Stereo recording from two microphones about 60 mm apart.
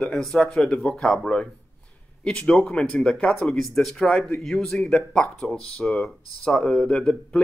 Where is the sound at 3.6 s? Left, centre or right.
Centre.